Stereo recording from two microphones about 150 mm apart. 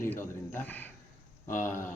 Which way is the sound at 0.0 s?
15° left (ahead or behind).